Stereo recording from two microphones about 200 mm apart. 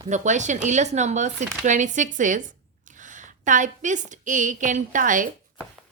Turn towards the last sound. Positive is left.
turn(degrees=-40)  # may be behind; listen again after turning